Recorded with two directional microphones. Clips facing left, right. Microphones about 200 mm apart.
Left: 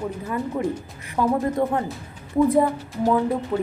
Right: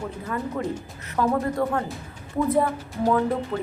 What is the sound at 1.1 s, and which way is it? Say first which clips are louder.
Speech: left 2 dB; 20° left (ahead or behind).